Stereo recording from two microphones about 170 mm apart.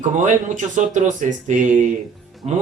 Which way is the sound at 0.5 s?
45° right (ahead or behind).